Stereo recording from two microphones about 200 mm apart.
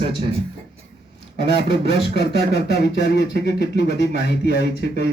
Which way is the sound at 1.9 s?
55° left (ahead or behind).